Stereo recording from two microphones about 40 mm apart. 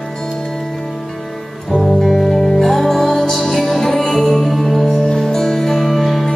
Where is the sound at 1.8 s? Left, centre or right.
Centre.